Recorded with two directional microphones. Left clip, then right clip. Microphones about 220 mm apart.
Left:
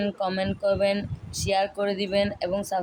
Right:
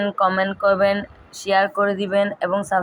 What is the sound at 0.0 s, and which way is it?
Speech, 10° left (ahead or behind).